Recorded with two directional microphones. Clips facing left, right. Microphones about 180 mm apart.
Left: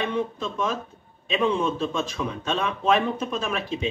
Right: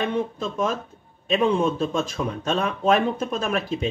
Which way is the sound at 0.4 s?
45° right (ahead or behind).